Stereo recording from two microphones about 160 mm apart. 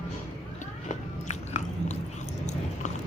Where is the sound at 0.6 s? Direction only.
45° left (ahead or behind).